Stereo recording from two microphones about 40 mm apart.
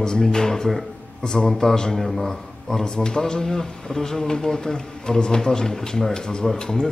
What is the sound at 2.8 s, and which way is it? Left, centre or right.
A man's voice, centre.